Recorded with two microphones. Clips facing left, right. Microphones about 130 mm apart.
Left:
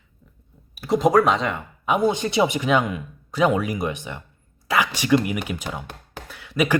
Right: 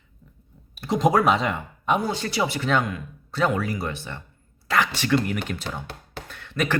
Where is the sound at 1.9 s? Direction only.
20° left (ahead or behind).